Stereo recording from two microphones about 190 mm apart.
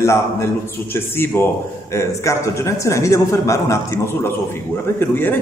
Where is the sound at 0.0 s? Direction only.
15° left (ahead or behind).